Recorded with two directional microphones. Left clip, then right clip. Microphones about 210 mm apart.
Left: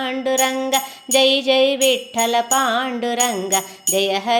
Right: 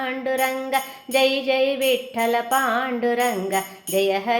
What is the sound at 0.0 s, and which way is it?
Music, 35° left (ahead or behind).